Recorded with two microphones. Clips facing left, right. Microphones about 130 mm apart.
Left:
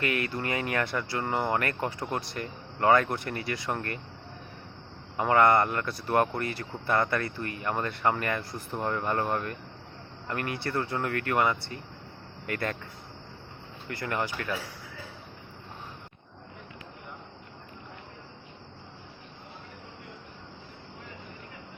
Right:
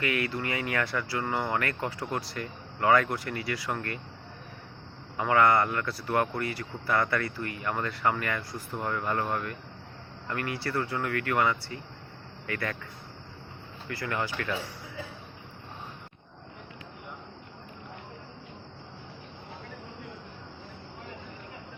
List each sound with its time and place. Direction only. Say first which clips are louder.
0.0 s speech: even; 25° left (ahead or behind)
5.1 s speech: left 1 dB; 25° left (ahead or behind)
10.2 s speech: even; 25° left (ahead or behind)
14.0 s speech: left 1 dB; 20° left (ahead or behind)